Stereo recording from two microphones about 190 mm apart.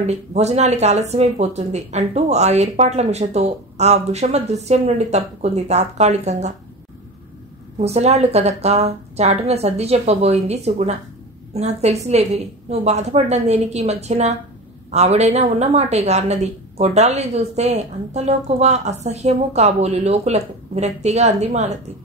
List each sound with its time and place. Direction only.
0.0 s a woman's voice: 35° right (ahead or behind)
7.8 s a woman's voice: 35° right (ahead or behind)